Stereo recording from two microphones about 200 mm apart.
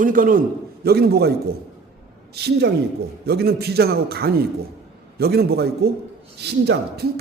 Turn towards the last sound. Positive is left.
turn(degrees=-55)  # may be behind; listen again after turning